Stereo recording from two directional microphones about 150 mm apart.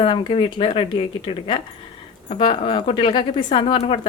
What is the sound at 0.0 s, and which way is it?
Speech, 35° left (ahead or behind).